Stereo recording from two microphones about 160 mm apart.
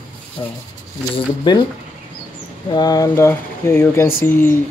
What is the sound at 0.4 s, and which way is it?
Speech, 30° left (ahead or behind).